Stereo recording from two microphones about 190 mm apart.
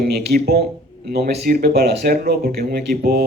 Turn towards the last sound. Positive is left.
turn(degrees=-55)  # may be behind; listen again after turning